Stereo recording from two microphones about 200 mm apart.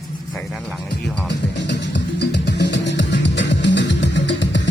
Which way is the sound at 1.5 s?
60° left (ahead or behind).